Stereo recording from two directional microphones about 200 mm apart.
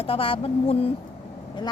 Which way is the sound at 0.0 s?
25° left (ahead or behind).